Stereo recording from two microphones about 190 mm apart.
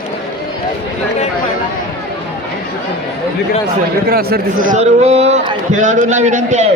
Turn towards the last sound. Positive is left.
turn(degrees=-40)  # may be behind; listen again after turning